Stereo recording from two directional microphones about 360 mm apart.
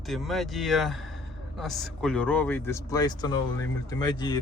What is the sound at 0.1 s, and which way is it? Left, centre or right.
Speech, centre.